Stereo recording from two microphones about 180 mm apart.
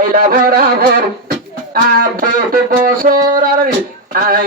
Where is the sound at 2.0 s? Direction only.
50° right (ahead or behind).